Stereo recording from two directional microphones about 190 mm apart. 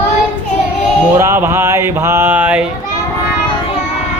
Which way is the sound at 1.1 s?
10° right (ahead or behind).